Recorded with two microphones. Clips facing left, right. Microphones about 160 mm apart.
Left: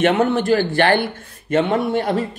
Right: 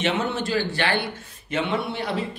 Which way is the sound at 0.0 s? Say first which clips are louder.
Left 8 dB; 55° left (ahead or behind).